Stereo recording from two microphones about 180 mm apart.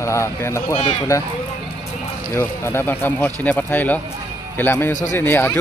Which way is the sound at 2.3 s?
10° left (ahead or behind).